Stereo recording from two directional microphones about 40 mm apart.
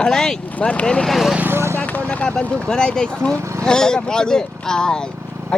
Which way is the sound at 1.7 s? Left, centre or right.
Left.